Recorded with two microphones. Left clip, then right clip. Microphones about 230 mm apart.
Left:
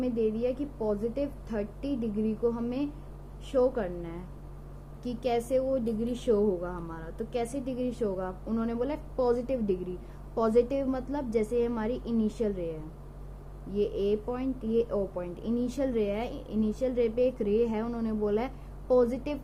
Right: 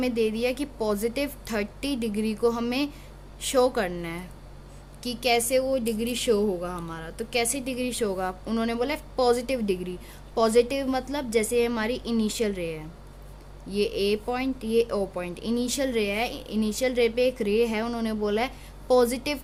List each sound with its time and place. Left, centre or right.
0.0 s a woman's voice: right